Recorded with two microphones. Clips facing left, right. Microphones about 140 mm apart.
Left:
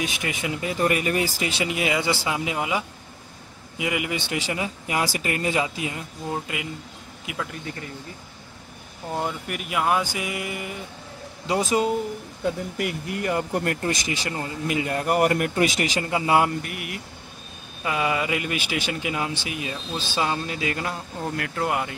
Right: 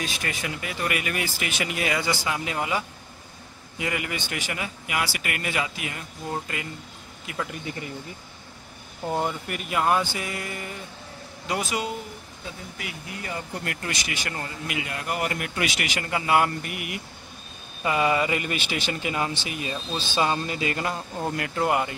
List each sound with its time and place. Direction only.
0.0 s speech: 20° left (ahead or behind)
6.3 s speech: 10° left (ahead or behind)
9.1 s speech: centre (ahead or behind)
11.4 s speech: 25° left (ahead or behind)
12.4 s speech: 55° left (ahead or behind)
13.8 s speech: 30° left (ahead or behind)
14.7 s speech: 40° left (ahead or behind)
16.1 s speech: 20° left (ahead or behind)
16.6 s speech: 5° right (ahead or behind)